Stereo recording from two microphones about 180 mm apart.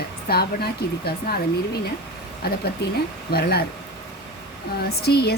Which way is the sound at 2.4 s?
60° left (ahead or behind).